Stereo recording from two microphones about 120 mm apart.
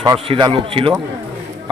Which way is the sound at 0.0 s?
40° right (ahead or behind).